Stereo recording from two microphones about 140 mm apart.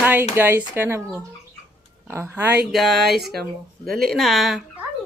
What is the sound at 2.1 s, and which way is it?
Speech, 15° right (ahead or behind).